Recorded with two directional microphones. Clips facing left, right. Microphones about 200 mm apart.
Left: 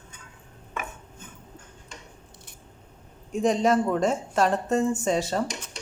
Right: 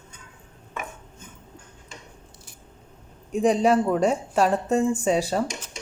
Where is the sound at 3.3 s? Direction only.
10° right (ahead or behind).